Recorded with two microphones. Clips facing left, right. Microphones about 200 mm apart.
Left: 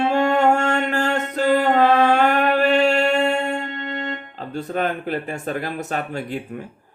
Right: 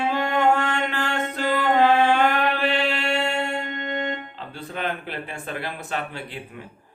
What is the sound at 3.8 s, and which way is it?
Music, 15° right (ahead or behind).